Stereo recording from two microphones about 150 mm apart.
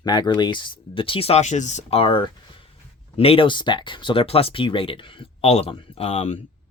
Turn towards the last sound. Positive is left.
turn(degrees=45)  # may be behind; listen again after turning